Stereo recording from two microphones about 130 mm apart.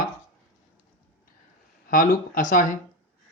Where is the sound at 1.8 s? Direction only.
90° left.